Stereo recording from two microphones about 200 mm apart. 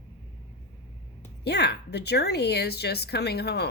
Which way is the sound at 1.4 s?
55° left (ahead or behind).